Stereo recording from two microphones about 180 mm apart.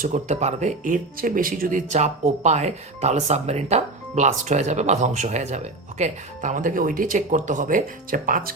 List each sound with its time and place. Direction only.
0.0 s speech: 40° right (ahead or behind)